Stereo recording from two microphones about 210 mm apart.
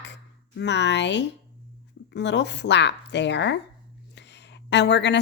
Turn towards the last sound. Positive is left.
turn(degrees=55)  # may be behind; listen again after turning